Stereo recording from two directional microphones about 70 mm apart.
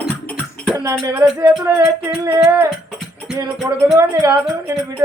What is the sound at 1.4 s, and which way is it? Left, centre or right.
Music, right.